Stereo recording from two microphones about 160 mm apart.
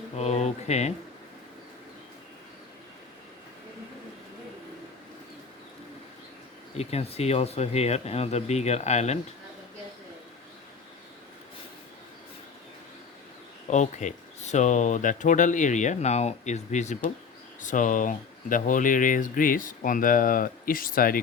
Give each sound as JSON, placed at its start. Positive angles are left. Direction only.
{"t": 0.2, "sound": "speech", "side_deg": 45}
{"t": 6.7, "sound": "speech", "side_deg": 40}
{"t": 13.7, "sound": "speech", "side_deg": 50}